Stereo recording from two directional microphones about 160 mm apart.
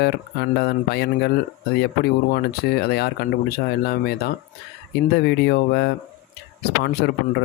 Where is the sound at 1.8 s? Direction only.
75° left (ahead or behind).